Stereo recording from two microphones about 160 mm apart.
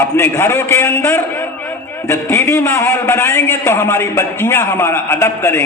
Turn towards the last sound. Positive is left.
turn(degrees=15)  # may be behind; listen again after turning